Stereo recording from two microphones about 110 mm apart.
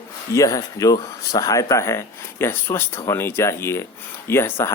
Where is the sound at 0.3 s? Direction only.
30° left (ahead or behind).